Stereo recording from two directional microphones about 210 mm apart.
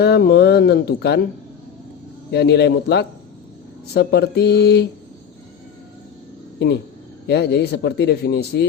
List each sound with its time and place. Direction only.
0.0 s a man's voice: 50° left (ahead or behind)
2.3 s a man's voice: 50° left (ahead or behind)
6.6 s a man's voice: 55° left (ahead or behind)